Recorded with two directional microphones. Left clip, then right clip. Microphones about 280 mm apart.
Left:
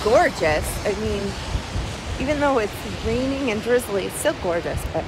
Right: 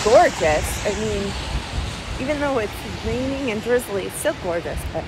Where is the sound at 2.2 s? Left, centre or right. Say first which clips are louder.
Left 2 dB; centre.